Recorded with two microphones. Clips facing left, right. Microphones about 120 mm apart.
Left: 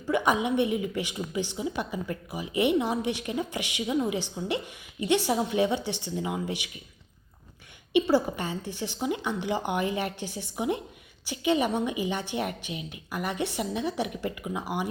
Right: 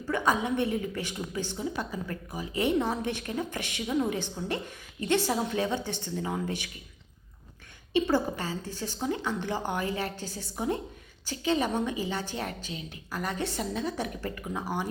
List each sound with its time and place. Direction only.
0.1 s a woman's voice: 15° left (ahead or behind)
7.9 s a woman's voice: 15° left (ahead or behind)